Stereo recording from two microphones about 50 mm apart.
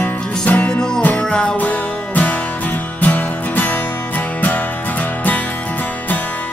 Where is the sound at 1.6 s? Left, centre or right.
Left.